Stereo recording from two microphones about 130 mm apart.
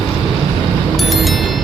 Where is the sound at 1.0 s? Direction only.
Centre (ahead or behind).